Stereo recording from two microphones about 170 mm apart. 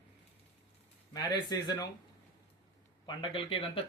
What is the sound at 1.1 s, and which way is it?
Speech, 25° left (ahead or behind).